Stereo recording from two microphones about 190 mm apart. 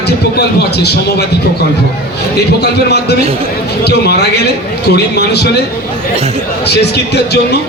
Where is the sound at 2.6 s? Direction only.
60° left (ahead or behind).